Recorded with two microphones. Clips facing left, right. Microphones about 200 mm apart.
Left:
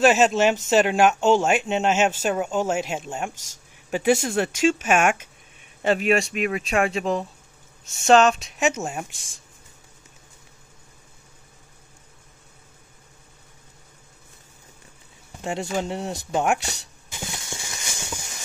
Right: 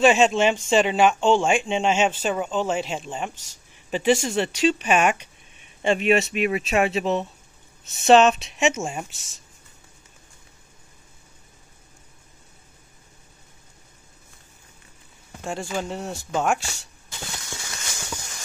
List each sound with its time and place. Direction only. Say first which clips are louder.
0.0 s speech: even; 5° left (ahead or behind)
15.4 s speech: left 2 dB; 20° left (ahead or behind)
17.1 s clip-clop: left 2 dB; 15° left (ahead or behind)